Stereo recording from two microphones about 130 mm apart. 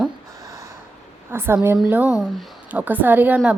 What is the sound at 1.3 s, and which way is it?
Speech, 20° right (ahead or behind).